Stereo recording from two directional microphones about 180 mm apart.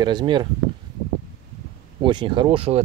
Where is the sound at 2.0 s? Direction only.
25° right (ahead or behind).